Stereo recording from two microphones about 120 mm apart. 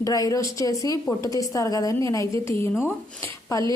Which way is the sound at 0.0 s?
30° left (ahead or behind).